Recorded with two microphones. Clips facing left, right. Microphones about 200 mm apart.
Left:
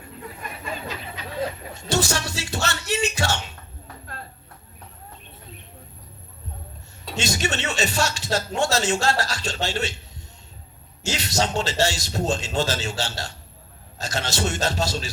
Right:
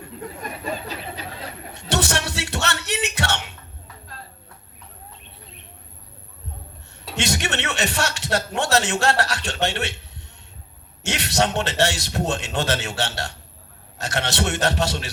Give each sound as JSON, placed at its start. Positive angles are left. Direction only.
{"t": 0.6, "sound": "a sound", "side_deg": -35}
{"t": 1.7, "sound": "music", "side_deg": -65}
{"t": 7.2, "sound": "a man's voice", "side_deg": -65}
{"t": 11.0, "sound": "a man's voice", "side_deg": -65}